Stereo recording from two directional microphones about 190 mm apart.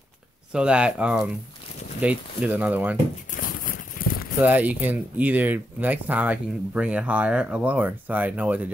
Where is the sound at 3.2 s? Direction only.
45° left (ahead or behind).